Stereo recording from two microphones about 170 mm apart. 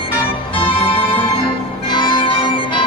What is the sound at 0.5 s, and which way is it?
Organ, 30° left (ahead or behind).